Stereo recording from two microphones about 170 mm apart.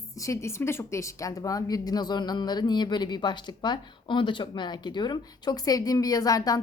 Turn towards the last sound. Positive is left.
turn(degrees=20)  # may be behind; listen again after turning